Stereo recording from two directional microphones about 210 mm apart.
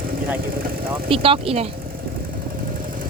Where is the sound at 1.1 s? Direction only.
25° right (ahead or behind).